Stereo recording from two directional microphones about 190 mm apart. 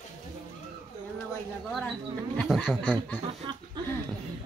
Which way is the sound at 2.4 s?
5° left (ahead or behind).